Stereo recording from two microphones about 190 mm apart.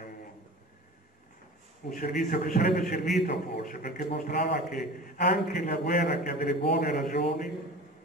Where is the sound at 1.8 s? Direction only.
45° left (ahead or behind).